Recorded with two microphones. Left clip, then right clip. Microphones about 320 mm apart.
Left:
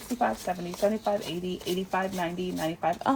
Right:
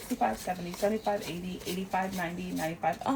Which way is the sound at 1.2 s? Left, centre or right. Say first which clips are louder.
Left 5 dB; centre.